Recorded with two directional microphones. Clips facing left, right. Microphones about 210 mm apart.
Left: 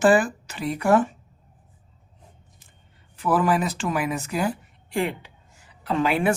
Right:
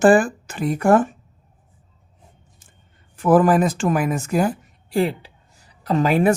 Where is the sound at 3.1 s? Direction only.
45° right (ahead or behind).